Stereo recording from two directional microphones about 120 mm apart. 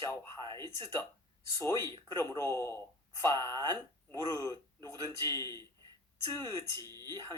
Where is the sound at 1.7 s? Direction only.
35° right (ahead or behind).